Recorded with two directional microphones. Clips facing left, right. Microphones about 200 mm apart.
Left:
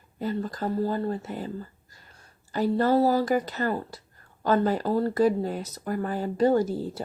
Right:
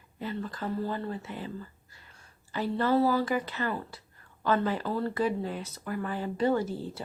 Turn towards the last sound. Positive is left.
turn(degrees=40)  # may be behind; listen again after turning